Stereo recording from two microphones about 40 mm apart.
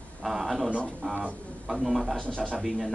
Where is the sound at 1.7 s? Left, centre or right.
Centre.